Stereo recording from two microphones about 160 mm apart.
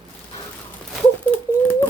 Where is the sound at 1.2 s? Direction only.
10° left (ahead or behind).